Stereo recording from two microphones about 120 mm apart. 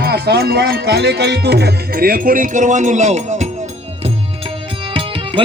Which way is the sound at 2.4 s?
90° right.